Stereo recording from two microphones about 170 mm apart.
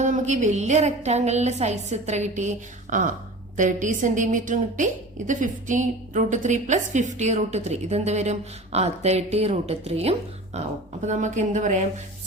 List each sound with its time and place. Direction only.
0.0 s a woman's voice: 45° right (ahead or behind)